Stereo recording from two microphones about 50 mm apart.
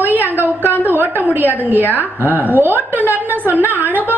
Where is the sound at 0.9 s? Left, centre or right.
Right.